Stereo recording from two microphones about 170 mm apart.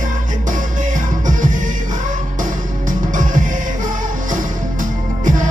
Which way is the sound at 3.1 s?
50° right (ahead or behind).